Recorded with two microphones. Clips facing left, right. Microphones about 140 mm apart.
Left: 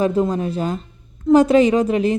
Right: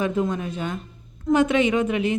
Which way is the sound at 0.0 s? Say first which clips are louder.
Left 5 dB; 35° left (ahead or behind).